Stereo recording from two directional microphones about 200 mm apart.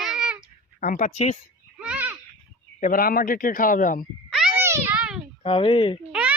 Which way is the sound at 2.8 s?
45° left (ahead or behind).